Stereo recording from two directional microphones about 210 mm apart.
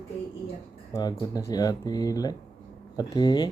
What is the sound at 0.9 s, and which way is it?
Speech, 20° left (ahead or behind).